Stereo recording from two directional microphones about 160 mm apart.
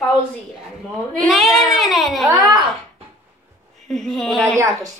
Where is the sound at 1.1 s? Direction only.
Centre (ahead or behind).